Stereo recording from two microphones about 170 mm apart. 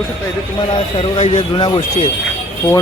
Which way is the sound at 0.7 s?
30° left (ahead or behind).